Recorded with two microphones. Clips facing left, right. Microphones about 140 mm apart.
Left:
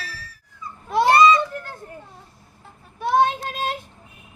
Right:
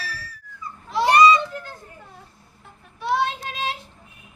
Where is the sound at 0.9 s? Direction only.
55° left (ahead or behind).